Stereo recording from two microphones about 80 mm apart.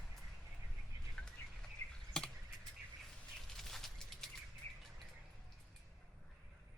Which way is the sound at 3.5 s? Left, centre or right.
Centre.